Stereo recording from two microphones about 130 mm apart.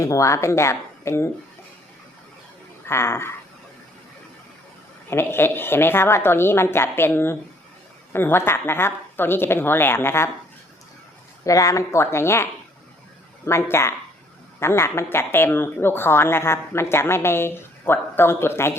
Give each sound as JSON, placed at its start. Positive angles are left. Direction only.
{"t": 0.0, "sound": "a woman's voice", "side_deg": 25}
{"t": 2.8, "sound": "a woman's voice", "side_deg": 20}
{"t": 5.0, "sound": "a woman's voice", "side_deg": 20}
{"t": 11.4, "sound": "a woman's voice", "side_deg": 25}